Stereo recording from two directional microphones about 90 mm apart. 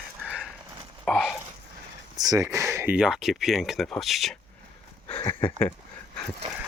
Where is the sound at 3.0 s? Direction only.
5° right (ahead or behind).